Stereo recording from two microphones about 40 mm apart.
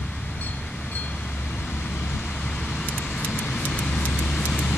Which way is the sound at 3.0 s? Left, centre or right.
Left.